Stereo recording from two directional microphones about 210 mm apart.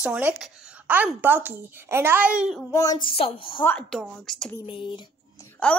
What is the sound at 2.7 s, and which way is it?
Speech, 15° left (ahead or behind).